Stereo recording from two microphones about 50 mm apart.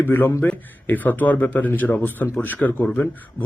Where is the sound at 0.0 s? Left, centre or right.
Left.